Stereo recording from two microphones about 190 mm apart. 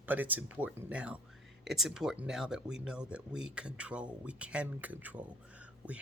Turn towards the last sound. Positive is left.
turn(degrees=-5)  # may be behind; listen again after turning